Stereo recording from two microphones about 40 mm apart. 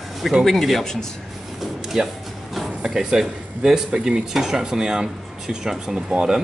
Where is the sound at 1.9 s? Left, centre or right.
Centre.